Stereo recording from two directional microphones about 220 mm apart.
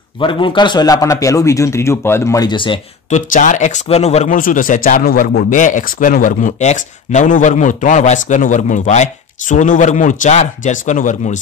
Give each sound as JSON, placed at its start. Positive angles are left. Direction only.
{"t": 0.2, "sound": "a man's voice", "side_deg": 20}
{"t": 3.2, "sound": "speech", "side_deg": 35}